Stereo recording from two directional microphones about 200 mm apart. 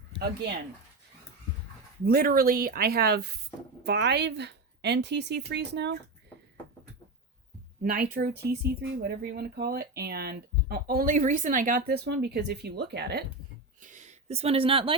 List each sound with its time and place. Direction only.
0.2 s speech: 55° right (ahead or behind)
2.0 s a woman's voice: 50° right (ahead or behind)
7.8 s speech: 45° right (ahead or behind)
13.8 s a sound: 40° right (ahead or behind)